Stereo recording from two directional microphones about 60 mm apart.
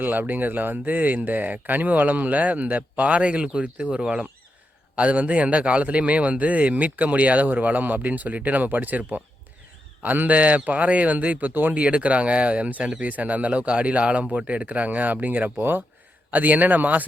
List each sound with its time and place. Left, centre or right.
0.0 s speech: right